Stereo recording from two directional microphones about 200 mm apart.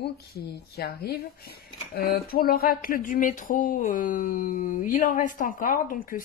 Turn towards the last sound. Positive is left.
turn(degrees=45)  # may be behind; listen again after turning